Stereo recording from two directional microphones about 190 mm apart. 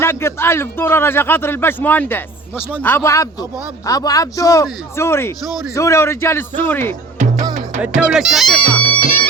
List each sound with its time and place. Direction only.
0.0 s a man's voice: 15° left (ahead or behind)
7.8 s speech: 5° right (ahead or behind)